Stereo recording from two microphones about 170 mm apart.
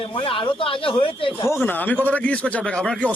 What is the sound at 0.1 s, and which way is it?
Speech, 30° left (ahead or behind).